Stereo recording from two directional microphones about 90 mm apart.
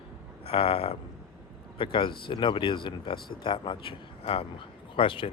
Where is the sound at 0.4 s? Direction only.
90° left.